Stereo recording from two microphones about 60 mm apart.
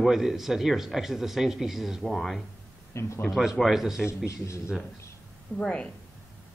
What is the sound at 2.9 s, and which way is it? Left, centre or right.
Speech, left.